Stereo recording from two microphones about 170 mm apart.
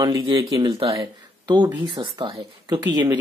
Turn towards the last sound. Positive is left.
turn(degrees=-25)  # may be behind; listen again after turning